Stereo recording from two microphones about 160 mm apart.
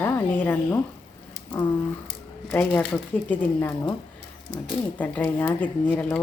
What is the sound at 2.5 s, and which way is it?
Speech, 5° left (ahead or behind).